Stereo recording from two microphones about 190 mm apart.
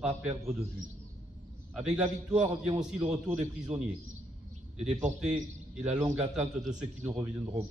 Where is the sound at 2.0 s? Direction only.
5° right (ahead or behind).